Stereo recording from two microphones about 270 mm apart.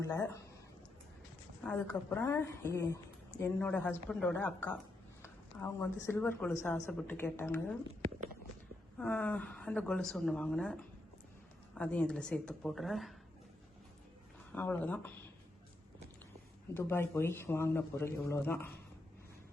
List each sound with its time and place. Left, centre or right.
0.0 s speech: centre
1.6 s a woman's voice: centre
9.0 s a woman's voice: centre
14.5 s a woman's voice: centre
16.7 s a woman's voice: centre